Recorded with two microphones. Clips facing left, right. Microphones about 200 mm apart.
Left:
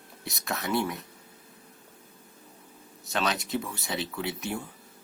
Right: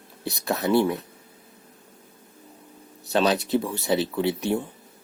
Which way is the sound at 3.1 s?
35° right (ahead or behind).